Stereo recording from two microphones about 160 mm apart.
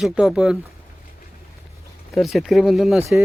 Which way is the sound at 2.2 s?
Centre (ahead or behind).